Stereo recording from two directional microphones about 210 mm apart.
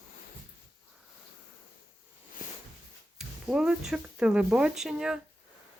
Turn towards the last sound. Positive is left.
turn(degrees=-5)  # may be behind; listen again after turning